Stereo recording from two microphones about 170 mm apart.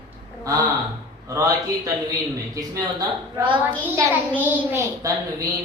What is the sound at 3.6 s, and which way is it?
A child's voice, 15° right (ahead or behind).